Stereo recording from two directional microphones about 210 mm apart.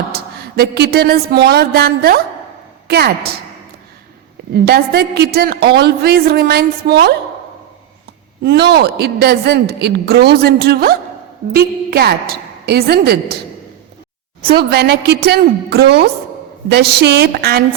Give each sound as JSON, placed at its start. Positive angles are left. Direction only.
{"t": 0.1, "sound": "a sound", "side_deg": -45}
{"t": 2.9, "sound": "a woman's voice", "side_deg": -50}
{"t": 4.5, "sound": "a woman's voice", "side_deg": -50}
{"t": 8.4, "sound": "a woman's voice", "side_deg": -50}
{"t": 14.6, "sound": "a woman's voice", "side_deg": -50}